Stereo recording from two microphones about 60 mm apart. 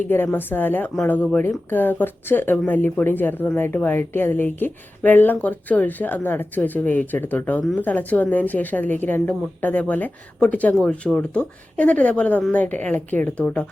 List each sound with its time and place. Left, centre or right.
0.3 s a woman's voice: left
10.8 s a woman's voice: centre; by 13.4 s left